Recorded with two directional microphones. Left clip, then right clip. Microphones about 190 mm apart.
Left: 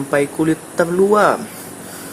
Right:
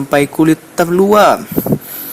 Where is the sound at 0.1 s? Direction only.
45° right (ahead or behind).